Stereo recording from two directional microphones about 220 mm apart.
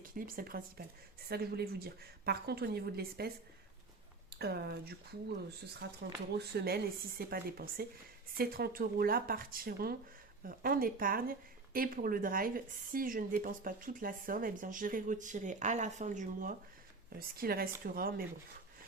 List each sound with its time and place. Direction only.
0.0 s a woman's voice: 40° right (ahead or behind)
4.4 s a woman's voice: 45° right (ahead or behind)